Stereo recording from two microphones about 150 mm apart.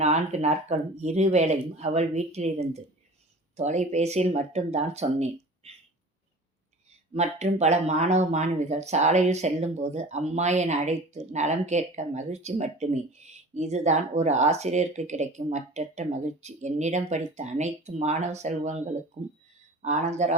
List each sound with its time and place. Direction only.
0.0 s speech: 50° right (ahead or behind)
7.1 s speech: 45° right (ahead or behind)